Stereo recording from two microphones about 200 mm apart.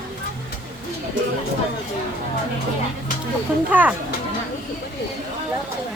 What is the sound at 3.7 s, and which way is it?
Speech, 10° right (ahead or behind).